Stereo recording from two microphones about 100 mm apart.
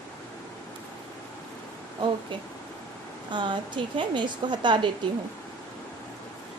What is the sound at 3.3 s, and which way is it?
A woman's voice, 50° right (ahead or behind).